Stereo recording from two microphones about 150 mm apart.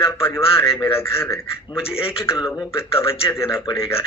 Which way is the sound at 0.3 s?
40° left (ahead or behind).